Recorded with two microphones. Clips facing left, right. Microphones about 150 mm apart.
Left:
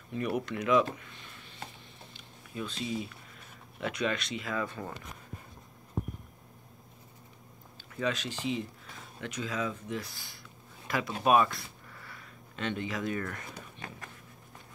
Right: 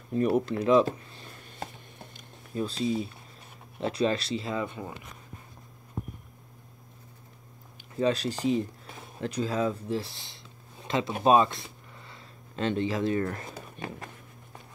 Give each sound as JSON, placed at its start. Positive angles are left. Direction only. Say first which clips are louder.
{"t": 0.1, "sound": "speech", "louder": "right 7 dB", "side_deg": -35}
{"t": 2.1, "sound": "a sound", "louder": "right 7 dB", "side_deg": -35}
{"t": 3.8, "sound": "speech", "louder": "right 5 dB", "side_deg": -30}
{"t": 7.9, "sound": "speech", "louder": "right 6 dB", "side_deg": -35}